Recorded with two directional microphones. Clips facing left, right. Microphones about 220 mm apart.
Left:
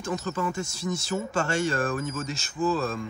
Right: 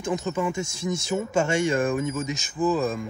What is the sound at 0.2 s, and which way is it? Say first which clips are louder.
Speech: right 3 dB; 15° right (ahead or behind).